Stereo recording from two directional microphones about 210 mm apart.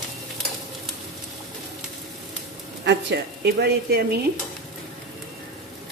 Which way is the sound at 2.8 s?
55° right (ahead or behind).